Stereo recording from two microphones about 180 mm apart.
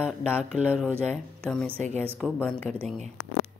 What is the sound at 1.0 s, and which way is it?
Speech, 5° left (ahead or behind).